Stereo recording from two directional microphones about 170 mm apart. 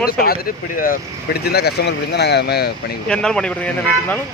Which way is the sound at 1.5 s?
70° left (ahead or behind).